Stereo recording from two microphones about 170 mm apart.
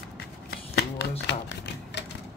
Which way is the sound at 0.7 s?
80° left.